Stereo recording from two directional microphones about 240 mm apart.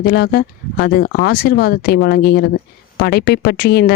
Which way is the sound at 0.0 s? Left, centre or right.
Left.